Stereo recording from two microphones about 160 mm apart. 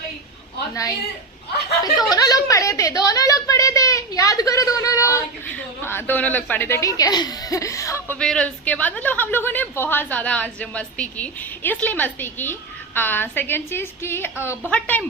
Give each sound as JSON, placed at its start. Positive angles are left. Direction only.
{"t": 0.7, "sound": "a woman's voice", "side_deg": 20}